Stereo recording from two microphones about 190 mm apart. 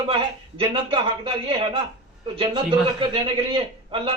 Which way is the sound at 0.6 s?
30° right (ahead or behind).